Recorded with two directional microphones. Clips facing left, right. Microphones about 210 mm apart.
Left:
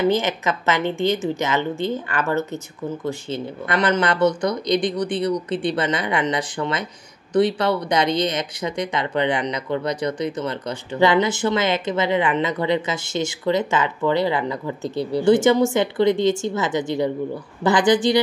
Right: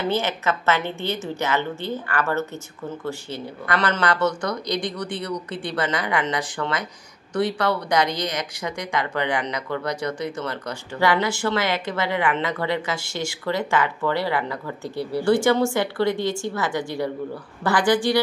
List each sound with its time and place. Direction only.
0.1 s a woman's voice: 15° left (ahead or behind)